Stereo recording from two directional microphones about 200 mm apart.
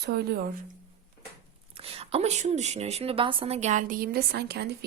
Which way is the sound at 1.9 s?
30° right (ahead or behind).